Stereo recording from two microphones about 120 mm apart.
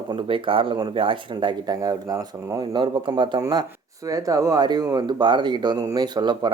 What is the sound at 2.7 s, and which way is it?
Speech, 40° right (ahead or behind).